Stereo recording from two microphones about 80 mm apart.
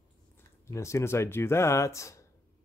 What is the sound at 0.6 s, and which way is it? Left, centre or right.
Speech, left.